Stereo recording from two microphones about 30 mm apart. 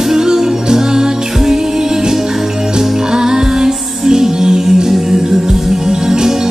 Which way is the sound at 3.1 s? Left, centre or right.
Centre.